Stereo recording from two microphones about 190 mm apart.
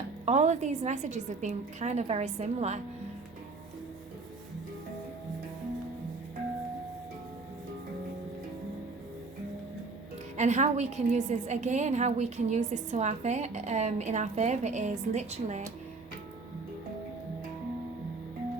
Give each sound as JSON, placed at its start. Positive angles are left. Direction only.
{"t": 0.3, "sound": "a woman's voice", "side_deg": -35}
{"t": 10.3, "sound": "a woman's voice", "side_deg": -40}